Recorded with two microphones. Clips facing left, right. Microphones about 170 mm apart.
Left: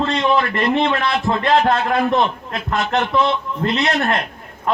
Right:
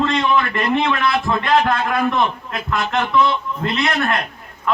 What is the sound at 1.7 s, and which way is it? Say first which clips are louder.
Speech: left 2 dB; 25° left (ahead or behind).